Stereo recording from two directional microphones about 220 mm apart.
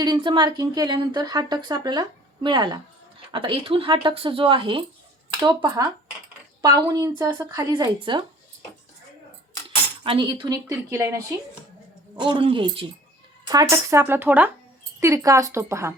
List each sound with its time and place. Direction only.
0.0 s a woman's voice: 20° right (ahead or behind)
10.0 s a woman's voice: 20° right (ahead or behind)